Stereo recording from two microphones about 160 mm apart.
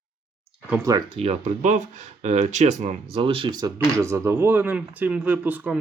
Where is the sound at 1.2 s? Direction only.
45° right (ahead or behind).